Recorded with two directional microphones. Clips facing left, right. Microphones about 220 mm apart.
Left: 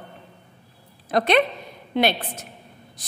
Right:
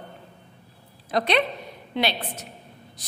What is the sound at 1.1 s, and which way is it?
A woman's voice, 50° left (ahead or behind).